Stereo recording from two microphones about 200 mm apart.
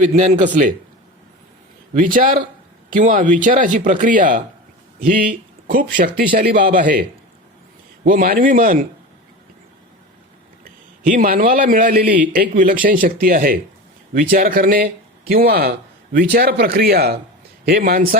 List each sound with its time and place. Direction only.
0.0 s speech: 40° right (ahead or behind)
1.9 s speech: 40° right (ahead or behind)
5.7 s speech: 45° right (ahead or behind)
8.0 s speech: 40° right (ahead or behind)
10.6 s a man's voice: 45° right (ahead or behind)